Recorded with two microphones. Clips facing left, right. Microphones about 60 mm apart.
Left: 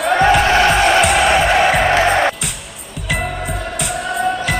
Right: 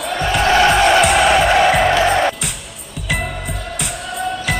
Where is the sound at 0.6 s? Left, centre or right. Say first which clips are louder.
Even; centre.